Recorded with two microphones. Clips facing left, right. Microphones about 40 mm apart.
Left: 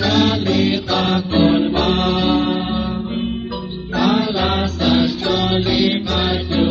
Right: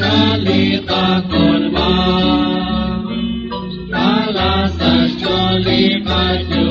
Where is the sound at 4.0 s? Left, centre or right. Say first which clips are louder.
Right 2 dB; right.